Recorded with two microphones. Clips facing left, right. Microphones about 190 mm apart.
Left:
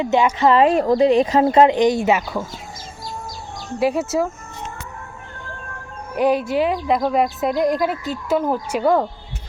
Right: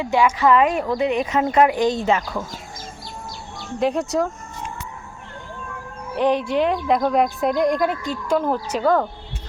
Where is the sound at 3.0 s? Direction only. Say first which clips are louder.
Left 3 dB; 60° right (ahead or behind).